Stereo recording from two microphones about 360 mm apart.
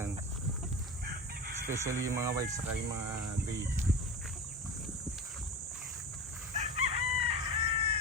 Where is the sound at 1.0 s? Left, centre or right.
Right.